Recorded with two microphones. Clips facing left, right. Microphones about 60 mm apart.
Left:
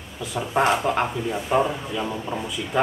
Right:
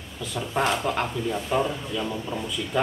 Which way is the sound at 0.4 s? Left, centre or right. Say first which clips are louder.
Left 4 dB; centre.